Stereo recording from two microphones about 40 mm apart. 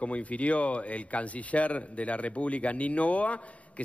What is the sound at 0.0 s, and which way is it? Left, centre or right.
A man's voice, left.